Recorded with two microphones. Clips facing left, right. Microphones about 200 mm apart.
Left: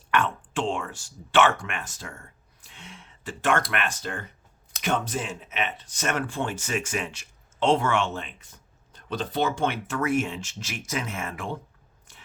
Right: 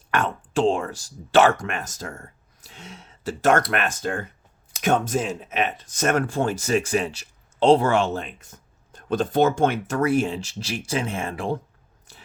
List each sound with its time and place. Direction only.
0.1 s speech: 40° right (ahead or behind)
12.1 s biting: 35° right (ahead or behind)